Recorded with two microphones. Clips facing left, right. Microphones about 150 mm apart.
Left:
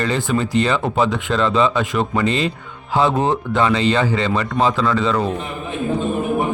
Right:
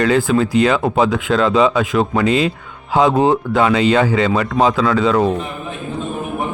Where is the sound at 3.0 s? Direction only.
20° right (ahead or behind).